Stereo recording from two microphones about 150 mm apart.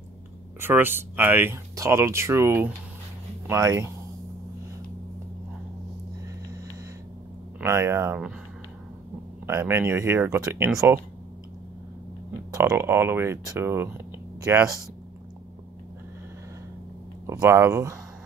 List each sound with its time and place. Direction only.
0.6 s speech: 15° right (ahead or behind)
7.6 s speech: 20° right (ahead or behind)
9.5 s speech: 15° right (ahead or behind)
12.7 s speech: 15° right (ahead or behind)
17.3 s speech: 15° right (ahead or behind)